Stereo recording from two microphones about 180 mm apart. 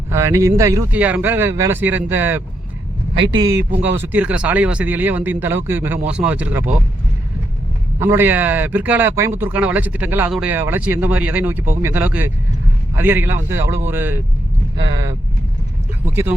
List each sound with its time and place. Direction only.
0.1 s speech: 15° right (ahead or behind)
7.9 s speech: 15° right (ahead or behind)